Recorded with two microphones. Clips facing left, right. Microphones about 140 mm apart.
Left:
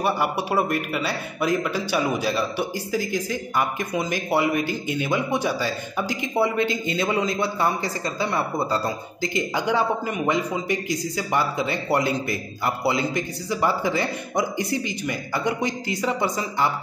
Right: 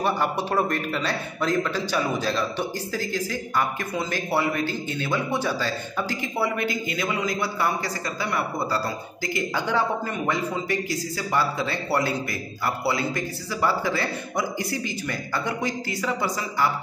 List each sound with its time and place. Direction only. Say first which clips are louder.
0.0 s a man's voice: left 1 dB; 10° left (ahead or behind)